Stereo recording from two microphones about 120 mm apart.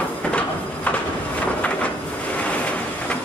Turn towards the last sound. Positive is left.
turn(degrees=10)  # may be behind; listen again after turning